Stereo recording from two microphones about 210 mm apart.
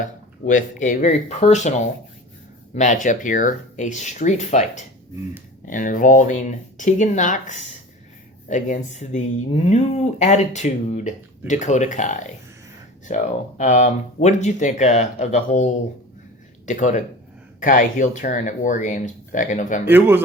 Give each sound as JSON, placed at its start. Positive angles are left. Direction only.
{"t": 0.0, "sound": "speech", "side_deg": 35}
{"t": 19.8, "sound": "speech", "side_deg": -10}